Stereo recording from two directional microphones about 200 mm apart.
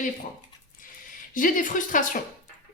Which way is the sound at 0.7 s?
40° left (ahead or behind).